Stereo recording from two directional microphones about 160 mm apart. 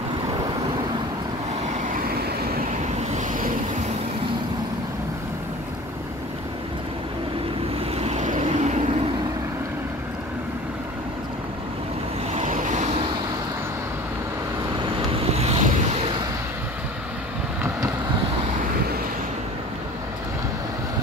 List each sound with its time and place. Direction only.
3.0 s vehicle: 45° right (ahead or behind)
7.9 s vehicle: 40° right (ahead or behind)
12.4 s vehicle: 50° right (ahead or behind)
15.3 s vehicle: 40° right (ahead or behind)